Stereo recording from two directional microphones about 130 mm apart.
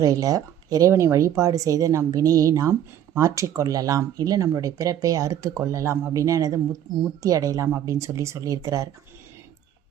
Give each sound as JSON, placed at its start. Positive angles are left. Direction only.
{"t": 0.0, "sound": "speech", "side_deg": -25}